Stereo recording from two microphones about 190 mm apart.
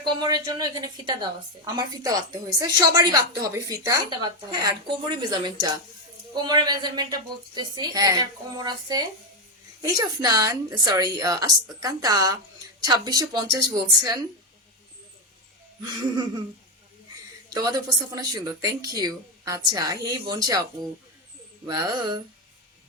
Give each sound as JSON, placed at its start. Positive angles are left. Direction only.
{"t": 0.2, "sound": "a woman's voice", "side_deg": -20}
{"t": 16.1, "sound": "a woman's voice", "side_deg": -20}
{"t": 17.5, "sound": "a woman's voice", "side_deg": -20}
{"t": 21.7, "sound": "a woman's voice", "side_deg": -20}